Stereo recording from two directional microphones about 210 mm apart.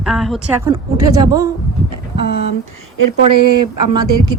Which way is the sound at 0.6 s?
15° right (ahead or behind).